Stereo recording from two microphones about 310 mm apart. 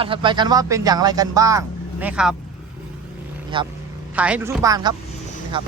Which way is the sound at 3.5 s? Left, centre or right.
Centre.